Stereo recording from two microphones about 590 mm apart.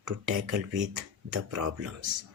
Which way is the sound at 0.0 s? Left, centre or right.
Right.